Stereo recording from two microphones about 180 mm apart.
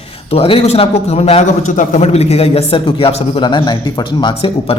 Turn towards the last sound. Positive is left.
turn(degrees=30)  # may be behind; listen again after turning